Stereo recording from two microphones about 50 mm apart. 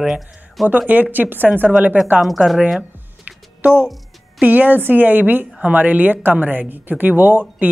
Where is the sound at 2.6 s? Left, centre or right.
Centre.